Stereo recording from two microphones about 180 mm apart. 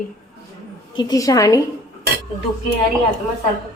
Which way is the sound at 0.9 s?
20° left (ahead or behind).